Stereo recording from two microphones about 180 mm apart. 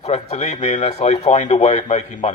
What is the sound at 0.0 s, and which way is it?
Speech, 35° left (ahead or behind).